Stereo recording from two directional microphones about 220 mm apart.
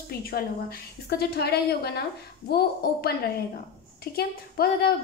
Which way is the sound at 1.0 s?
45° left (ahead or behind).